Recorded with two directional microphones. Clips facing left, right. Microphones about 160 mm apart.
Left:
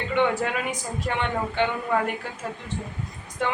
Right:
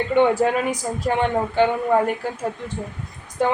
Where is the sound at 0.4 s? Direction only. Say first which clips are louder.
Right 7 dB; 35° right (ahead or behind).